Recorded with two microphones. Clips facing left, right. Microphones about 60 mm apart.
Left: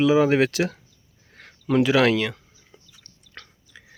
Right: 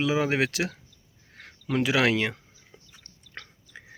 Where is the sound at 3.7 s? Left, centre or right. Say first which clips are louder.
Right 2 dB; right.